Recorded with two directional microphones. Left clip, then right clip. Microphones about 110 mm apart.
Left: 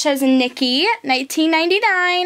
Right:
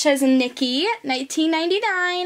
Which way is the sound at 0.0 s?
15° left (ahead or behind).